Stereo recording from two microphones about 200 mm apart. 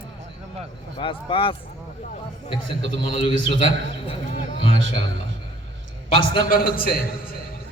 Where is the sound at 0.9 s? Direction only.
25° left (ahead or behind).